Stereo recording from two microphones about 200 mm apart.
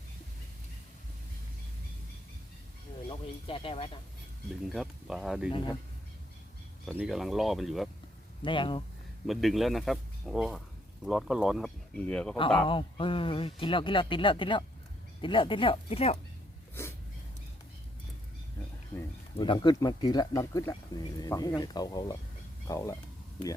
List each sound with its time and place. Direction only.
3.1 s speech: 25° left (ahead or behind)
4.6 s a man's voice: centre (ahead or behind)
5.5 s speech: 25° left (ahead or behind)
6.8 s a man's voice: centre (ahead or behind)
8.4 s speech: 25° left (ahead or behind)
9.2 s a man's voice: centre (ahead or behind)
12.6 s speech: 25° left (ahead or behind)
19.4 s speech: 20° left (ahead or behind)